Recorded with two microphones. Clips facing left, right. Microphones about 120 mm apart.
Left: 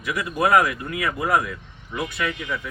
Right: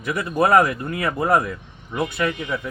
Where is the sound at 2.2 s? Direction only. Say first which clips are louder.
Right 3 dB; 25° right (ahead or behind).